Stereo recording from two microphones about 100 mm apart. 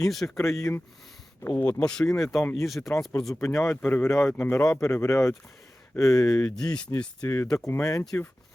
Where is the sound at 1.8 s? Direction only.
5° left (ahead or behind).